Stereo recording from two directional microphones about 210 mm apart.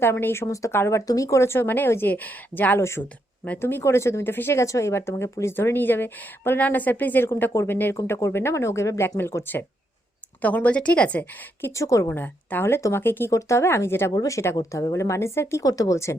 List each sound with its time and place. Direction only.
0.0 s speech: 10° left (ahead or behind)